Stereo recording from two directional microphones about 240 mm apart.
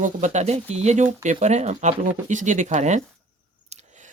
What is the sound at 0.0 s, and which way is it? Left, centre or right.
Speech, right.